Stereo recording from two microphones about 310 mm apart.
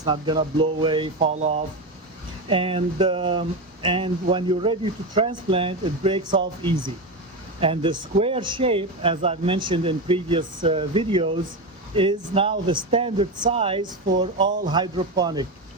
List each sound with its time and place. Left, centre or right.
0.0 s speech: centre